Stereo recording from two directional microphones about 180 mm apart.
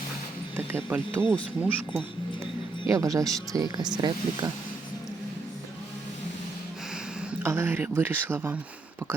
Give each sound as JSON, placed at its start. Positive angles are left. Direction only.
{"t": 0.5, "sound": "speech", "side_deg": -10}
{"t": 7.3, "sound": "speech", "side_deg": -15}